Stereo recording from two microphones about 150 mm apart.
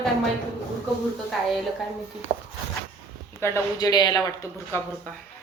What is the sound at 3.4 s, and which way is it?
Speech, 20° left (ahead or behind).